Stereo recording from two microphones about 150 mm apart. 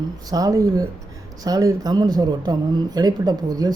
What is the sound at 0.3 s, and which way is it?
Speech, 25° right (ahead or behind).